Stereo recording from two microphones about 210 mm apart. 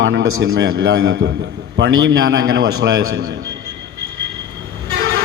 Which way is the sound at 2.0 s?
65° right (ahead or behind).